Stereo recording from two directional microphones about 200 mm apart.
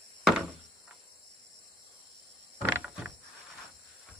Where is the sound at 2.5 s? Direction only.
10° right (ahead or behind).